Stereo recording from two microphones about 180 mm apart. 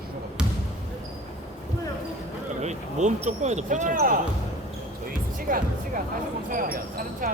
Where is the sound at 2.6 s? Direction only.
40° right (ahead or behind).